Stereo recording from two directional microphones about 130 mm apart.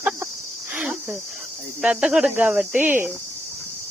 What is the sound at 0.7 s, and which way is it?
Cricket, 10° right (ahead or behind).